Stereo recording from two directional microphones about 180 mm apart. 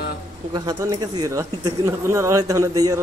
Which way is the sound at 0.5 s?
20° right (ahead or behind).